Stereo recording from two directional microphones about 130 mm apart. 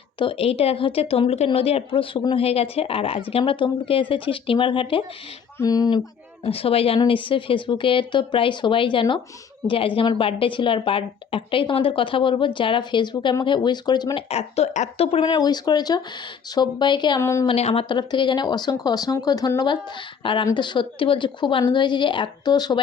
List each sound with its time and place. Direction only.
0.2 s speech: 45° left (ahead or behind)
5.5 s a sound: 30° left (ahead or behind)
6.4 s a woman's voice: 45° left (ahead or behind)
14.3 s speech: 50° left (ahead or behind)
15.0 s speech: 50° left (ahead or behind)
15.3 s a woman's voice: 30° left (ahead or behind)
17.2 s a sound: 20° left (ahead or behind)
17.4 s speech: 50° left (ahead or behind)
17.8 s a woman's voice: 35° left (ahead or behind)